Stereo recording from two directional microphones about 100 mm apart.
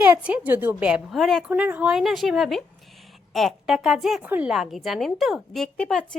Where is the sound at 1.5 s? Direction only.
15° right (ahead or behind).